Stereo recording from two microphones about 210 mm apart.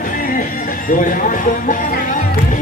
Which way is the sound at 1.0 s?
40° left (ahead or behind).